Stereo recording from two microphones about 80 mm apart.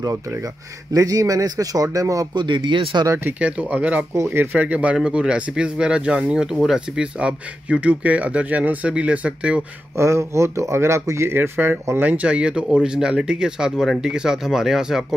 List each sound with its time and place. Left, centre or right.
0.9 s speech: right
2.3 s speech: right
3.3 s speech: centre
4.1 s speech: right; by 9.7 s centre
9.9 s speech: right; by 15.1 s centre